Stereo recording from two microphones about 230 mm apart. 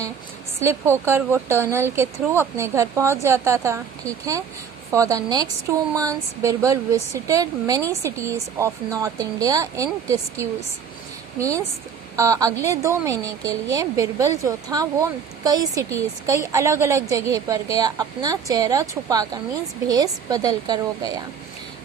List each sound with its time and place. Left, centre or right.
0.6 s speech: centre
4.9 s speech: centre